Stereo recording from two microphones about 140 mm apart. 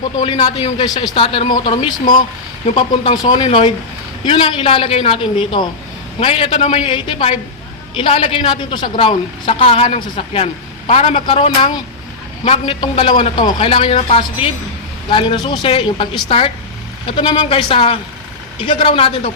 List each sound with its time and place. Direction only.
0.2 s a man's voice: 40° left (ahead or behind)
2.7 s a man's voice: 40° left (ahead or behind)